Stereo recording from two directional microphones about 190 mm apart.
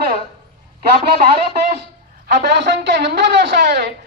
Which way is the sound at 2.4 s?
60° right (ahead or behind).